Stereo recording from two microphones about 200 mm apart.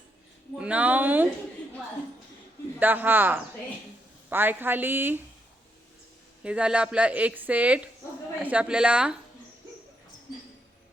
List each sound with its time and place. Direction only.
0.6 s speech: 5° right (ahead or behind)
2.7 s a woman's voice: 10° right (ahead or behind)
6.4 s a woman's voice: 5° right (ahead or behind)